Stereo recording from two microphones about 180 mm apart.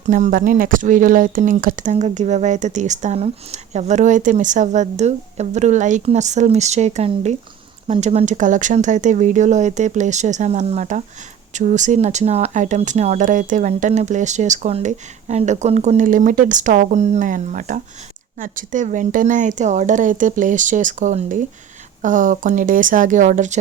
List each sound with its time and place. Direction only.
0.0 s speech: 45° right (ahead or behind)